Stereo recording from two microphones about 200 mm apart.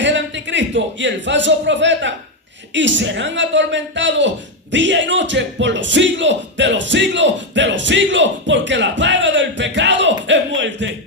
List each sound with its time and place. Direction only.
0.0 s a man's voice: 65° right (ahead or behind)